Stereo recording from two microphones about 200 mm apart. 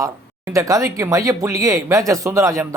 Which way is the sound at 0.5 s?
15° right (ahead or behind).